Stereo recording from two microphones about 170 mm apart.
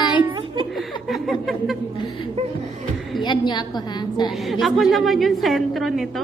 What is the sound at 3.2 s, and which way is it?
A woman's voice, 25° left (ahead or behind).